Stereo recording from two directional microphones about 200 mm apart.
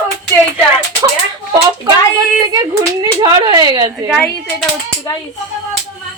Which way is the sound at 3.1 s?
25° right (ahead or behind).